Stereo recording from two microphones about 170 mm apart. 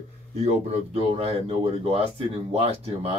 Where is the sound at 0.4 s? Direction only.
40° right (ahead or behind).